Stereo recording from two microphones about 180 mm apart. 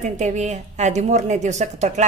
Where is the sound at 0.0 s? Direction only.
40° right (ahead or behind).